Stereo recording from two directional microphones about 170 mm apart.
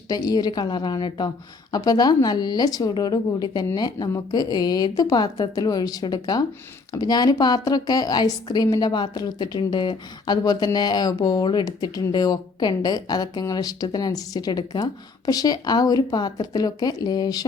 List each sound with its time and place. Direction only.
0.1 s speech: 20° left (ahead or behind)